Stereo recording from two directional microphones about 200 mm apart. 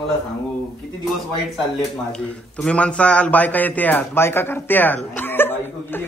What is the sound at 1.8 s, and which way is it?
A man's voice, 5° left (ahead or behind).